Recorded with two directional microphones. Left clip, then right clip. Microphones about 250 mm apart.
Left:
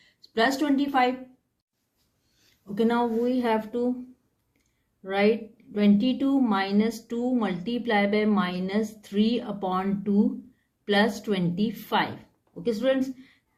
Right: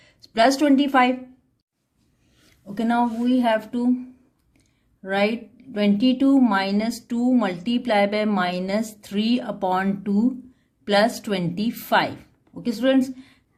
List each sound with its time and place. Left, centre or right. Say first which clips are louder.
0.2 s speech: right 6 dB; right
2.7 s speech: right 2 dB; right
5.7 s speech: right 3 dB; right